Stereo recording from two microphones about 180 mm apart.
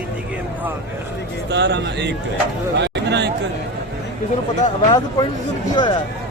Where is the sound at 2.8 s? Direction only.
70° right (ahead or behind).